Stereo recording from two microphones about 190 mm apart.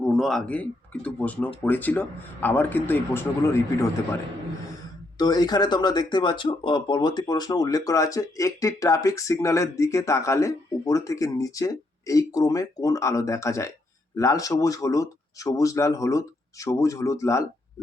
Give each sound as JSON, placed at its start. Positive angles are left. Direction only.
{"t": 0.0, "sound": "speech", "side_deg": 0}
{"t": 5.1, "sound": "speech", "side_deg": 20}